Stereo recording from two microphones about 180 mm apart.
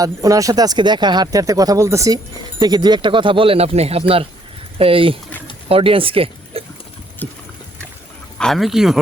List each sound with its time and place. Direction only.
0.0 s speech: 20° right (ahead or behind)
7.2 s a sound: 10° left (ahead or behind)
8.4 s speech: centre (ahead or behind)